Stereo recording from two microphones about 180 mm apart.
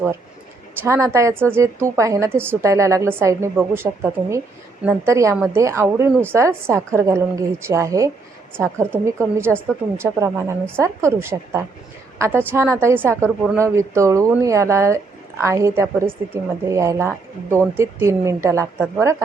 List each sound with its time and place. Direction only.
0.8 s speech: 15° right (ahead or behind)